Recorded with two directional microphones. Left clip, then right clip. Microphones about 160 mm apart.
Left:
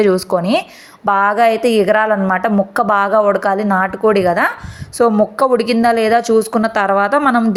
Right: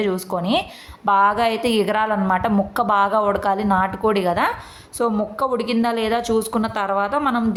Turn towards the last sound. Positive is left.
turn(degrees=40)  # may be behind; listen again after turning